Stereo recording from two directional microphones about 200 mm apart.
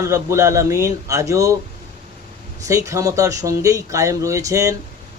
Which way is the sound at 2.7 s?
15° right (ahead or behind).